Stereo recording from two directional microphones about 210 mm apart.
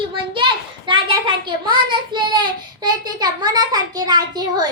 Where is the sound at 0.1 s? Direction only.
25° right (ahead or behind).